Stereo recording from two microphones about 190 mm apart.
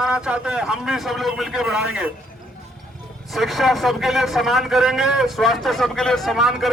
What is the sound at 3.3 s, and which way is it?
A man's voice, centre (ahead or behind).